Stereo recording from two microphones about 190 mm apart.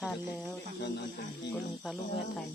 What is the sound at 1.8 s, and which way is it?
Speech, centre (ahead or behind).